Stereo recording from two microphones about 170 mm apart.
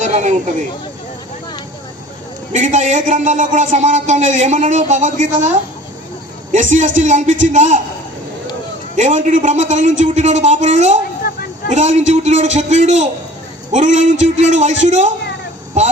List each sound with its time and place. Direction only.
0.0 s speech: 45° right (ahead or behind)
2.5 s a man's voice: 45° right (ahead or behind)
9.0 s a man's voice: 45° right (ahead or behind)